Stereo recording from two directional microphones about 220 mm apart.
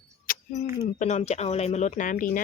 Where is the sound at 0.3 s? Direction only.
35° left (ahead or behind).